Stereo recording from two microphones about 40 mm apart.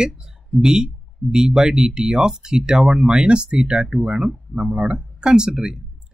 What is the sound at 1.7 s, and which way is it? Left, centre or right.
Speech, centre.